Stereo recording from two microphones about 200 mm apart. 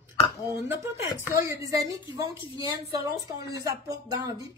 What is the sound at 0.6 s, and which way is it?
Speech, 10° right (ahead or behind).